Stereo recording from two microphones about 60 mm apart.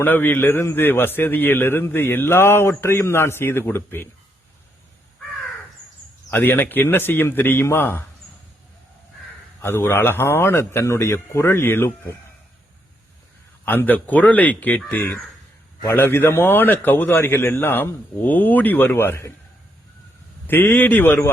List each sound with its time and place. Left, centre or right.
0.0 s a man's voice: left
6.3 s a man's voice: left
9.6 s a man's voice: left
13.7 s a man's voice: left
15.9 s a man's voice: left
20.5 s a man's voice: left